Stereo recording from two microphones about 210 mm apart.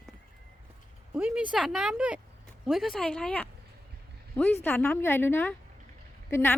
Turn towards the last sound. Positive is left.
turn(degrees=10)  # may be behind; listen again after turning